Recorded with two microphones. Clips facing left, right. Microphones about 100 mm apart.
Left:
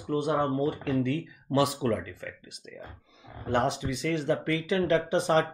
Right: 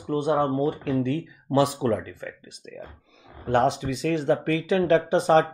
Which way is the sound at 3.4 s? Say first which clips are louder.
Right 5 dB; 40° right (ahead or behind).